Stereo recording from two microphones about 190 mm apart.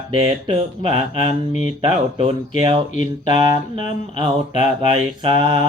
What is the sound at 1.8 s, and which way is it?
Speech, 30° right (ahead or behind).